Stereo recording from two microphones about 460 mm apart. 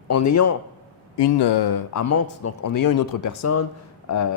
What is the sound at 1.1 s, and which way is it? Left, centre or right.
Speech, left.